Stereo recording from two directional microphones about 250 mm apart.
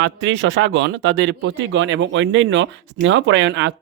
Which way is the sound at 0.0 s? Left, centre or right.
Right.